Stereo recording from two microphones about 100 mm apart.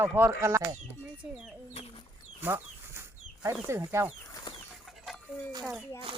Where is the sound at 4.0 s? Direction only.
25° right (ahead or behind).